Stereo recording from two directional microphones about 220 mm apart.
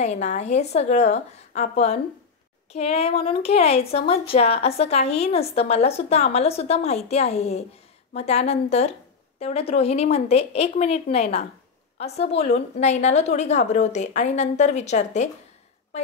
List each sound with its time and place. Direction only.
0.0 s a woman's voice: 30° left (ahead or behind)